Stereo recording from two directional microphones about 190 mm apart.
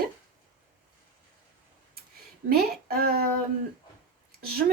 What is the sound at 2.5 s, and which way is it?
Speech, 55° right (ahead or behind).